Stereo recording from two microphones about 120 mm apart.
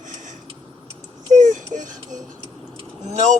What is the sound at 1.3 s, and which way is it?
Speech, 90° right.